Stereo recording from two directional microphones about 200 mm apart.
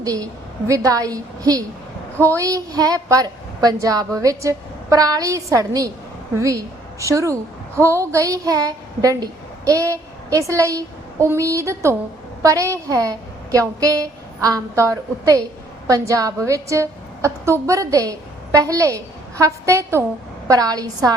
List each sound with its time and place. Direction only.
0.0 s a woman's voice: 20° right (ahead or behind)
7.0 s a woman's voice: 15° right (ahead or behind)